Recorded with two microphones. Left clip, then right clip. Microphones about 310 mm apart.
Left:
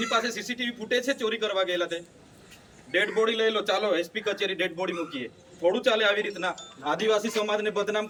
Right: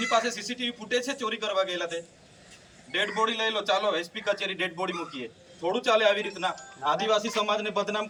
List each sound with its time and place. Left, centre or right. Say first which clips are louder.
0.0 s a man's voice: right 1 dB; centre